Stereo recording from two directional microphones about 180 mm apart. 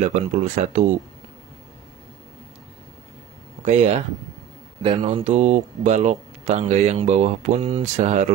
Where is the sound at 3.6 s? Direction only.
35° right (ahead or behind).